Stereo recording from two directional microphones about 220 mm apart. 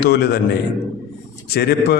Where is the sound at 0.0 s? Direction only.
50° left (ahead or behind).